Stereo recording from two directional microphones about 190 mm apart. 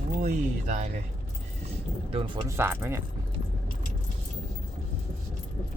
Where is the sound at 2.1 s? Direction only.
25° right (ahead or behind).